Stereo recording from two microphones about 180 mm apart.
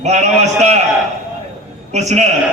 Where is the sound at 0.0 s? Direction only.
40° right (ahead or behind).